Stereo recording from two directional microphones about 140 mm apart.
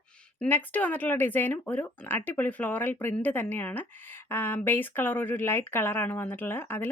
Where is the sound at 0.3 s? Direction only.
10° left (ahead or behind).